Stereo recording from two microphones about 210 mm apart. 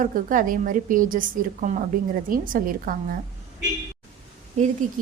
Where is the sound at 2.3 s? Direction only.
40° right (ahead or behind).